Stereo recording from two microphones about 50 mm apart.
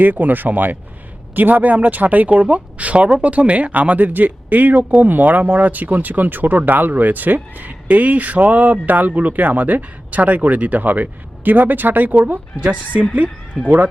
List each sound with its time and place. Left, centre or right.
0.0 s speech: right